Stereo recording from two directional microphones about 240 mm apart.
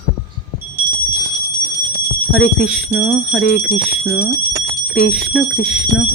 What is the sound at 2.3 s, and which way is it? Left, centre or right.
Speech, centre.